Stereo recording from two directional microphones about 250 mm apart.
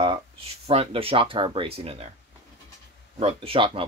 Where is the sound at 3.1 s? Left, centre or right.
Right.